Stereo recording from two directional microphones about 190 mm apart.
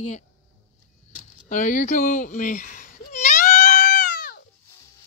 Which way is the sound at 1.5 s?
40° left (ahead or behind).